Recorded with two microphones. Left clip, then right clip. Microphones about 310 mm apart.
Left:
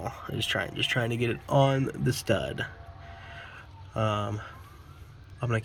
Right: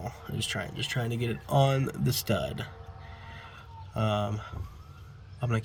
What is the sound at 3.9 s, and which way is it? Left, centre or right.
Speech, centre.